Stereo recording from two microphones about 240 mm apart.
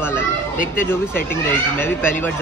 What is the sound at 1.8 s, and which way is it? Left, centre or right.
Speech, centre.